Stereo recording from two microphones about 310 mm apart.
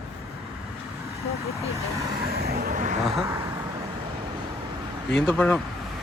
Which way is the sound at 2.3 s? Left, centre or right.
Right.